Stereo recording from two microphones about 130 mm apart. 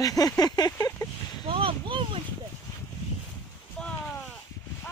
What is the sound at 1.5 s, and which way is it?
Speech, 45° right (ahead or behind).